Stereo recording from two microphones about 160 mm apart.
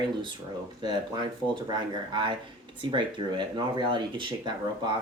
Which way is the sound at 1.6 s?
30° right (ahead or behind).